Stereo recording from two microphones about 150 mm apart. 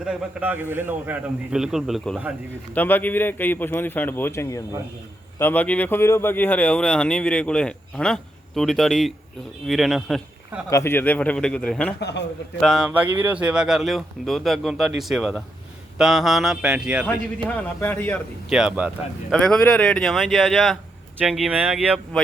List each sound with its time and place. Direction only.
0.0 s a man's voice: 5° right (ahead or behind)
2.7 s speech: 10° left (ahead or behind)
10.7 s speech: 20° left (ahead or behind); by 17.1 s 10° right (ahead or behind)
17.4 s speech: 10° left (ahead or behind)
18.4 s speech: 5° right (ahead or behind)